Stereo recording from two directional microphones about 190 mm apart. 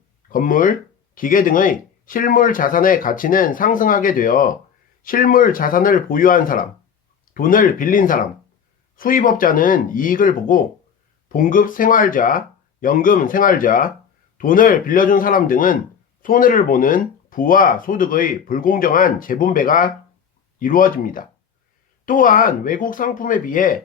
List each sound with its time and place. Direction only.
0.3 s speech: 45° left (ahead or behind)